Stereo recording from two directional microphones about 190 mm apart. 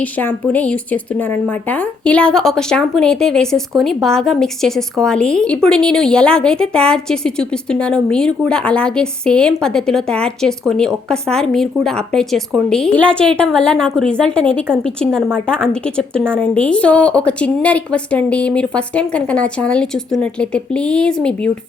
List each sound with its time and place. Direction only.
0.0 s a woman's voice: 10° left (ahead or behind)